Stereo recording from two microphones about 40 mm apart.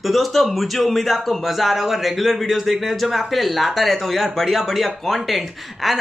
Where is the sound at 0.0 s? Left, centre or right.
Centre.